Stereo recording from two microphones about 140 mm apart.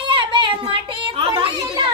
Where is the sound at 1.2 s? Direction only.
40° right (ahead or behind).